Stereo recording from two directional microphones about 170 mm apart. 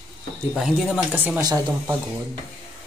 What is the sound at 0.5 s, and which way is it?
Speech, 5° right (ahead or behind).